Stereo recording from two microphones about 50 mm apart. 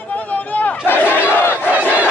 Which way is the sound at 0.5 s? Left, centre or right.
Left.